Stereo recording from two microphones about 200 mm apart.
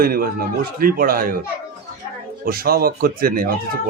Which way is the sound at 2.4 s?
50° right (ahead or behind).